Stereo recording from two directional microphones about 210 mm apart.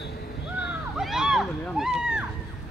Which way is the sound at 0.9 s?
5° right (ahead or behind).